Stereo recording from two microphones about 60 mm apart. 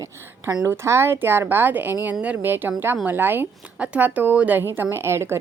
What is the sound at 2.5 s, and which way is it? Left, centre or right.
A woman's voice, right.